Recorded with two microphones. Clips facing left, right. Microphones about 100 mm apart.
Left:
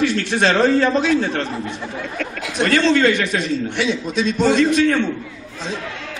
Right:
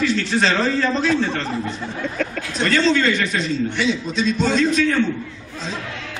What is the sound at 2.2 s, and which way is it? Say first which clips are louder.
A man's voice: left 3 dB; 80° left.